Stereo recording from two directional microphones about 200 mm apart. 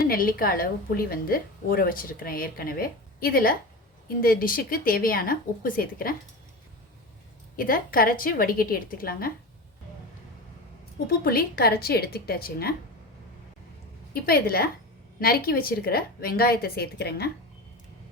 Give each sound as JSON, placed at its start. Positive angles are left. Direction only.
{"t": 0.0, "sound": "a woman's voice", "side_deg": 45}
{"t": 7.5, "sound": "a woman's voice", "side_deg": 45}
{"t": 11.0, "sound": "a woman's voice", "side_deg": 50}
{"t": 14.1, "sound": "a woman's voice", "side_deg": 50}